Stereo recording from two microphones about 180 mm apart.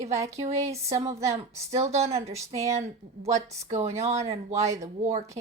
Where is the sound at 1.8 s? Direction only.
35° right (ahead or behind).